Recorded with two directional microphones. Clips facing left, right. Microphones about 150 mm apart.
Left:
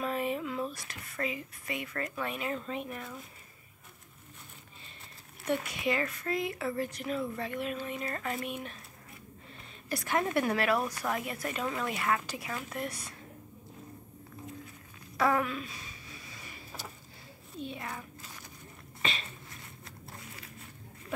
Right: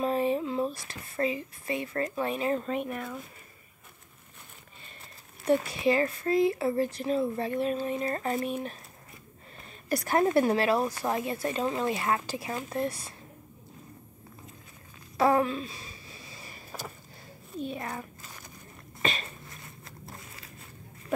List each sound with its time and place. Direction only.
0.0 s speech: 35° right (ahead or behind)
2.6 s speech: 55° right (ahead or behind)
5.4 s speech: 30° right (ahead or behind)
9.8 s speech: 40° right (ahead or behind)
15.1 s a sound: 30° right (ahead or behind)
17.6 s a child's voice: 45° right (ahead or behind)